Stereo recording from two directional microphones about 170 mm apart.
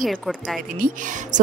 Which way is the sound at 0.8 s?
50° right (ahead or behind).